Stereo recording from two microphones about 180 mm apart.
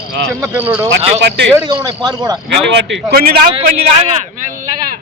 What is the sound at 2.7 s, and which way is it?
Speech, 75° right (ahead or behind).